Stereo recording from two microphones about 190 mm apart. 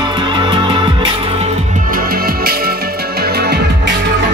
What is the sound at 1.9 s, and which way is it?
Music, 50° right (ahead or behind).